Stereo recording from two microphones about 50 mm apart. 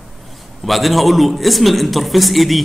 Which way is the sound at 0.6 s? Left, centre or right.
Centre.